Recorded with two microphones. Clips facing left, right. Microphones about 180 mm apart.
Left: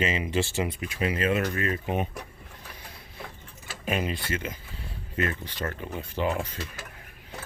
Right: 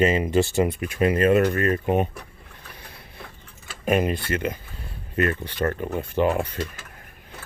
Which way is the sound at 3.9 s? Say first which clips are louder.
Right 7 dB; 50° right (ahead or behind).